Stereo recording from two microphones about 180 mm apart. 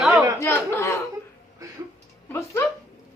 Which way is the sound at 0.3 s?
15° left (ahead or behind).